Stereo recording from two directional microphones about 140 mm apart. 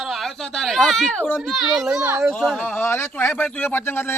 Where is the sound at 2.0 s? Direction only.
15° right (ahead or behind).